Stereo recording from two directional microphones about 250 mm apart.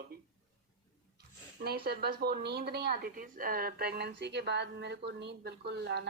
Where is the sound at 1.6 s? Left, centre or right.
Right.